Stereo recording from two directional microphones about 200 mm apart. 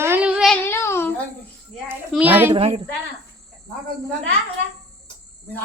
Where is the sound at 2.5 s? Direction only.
30° right (ahead or behind).